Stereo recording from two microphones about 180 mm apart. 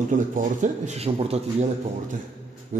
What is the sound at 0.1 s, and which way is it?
Speech, 45° right (ahead or behind).